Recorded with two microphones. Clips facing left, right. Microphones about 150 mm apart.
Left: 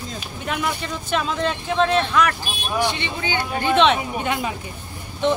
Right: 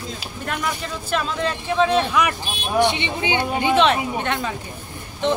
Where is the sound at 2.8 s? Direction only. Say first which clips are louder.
Right 5 dB; 25° right (ahead or behind).